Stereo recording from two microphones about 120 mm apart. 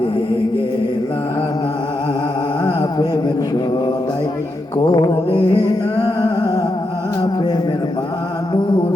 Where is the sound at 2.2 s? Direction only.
40° left (ahead or behind).